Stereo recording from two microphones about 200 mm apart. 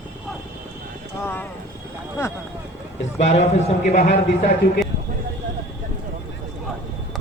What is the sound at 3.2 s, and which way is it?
Speech, 35° left (ahead or behind).